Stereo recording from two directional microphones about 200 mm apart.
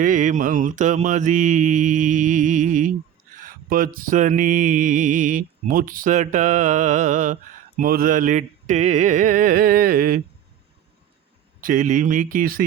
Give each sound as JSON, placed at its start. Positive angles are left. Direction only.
{"t": 0.0, "sound": "mantra", "side_deg": -40}
{"t": 7.8, "sound": "a sound", "side_deg": -45}
{"t": 11.6, "sound": "mantra", "side_deg": -40}